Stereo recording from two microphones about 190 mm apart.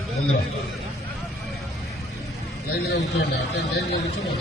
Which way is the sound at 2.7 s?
60° left (ahead or behind).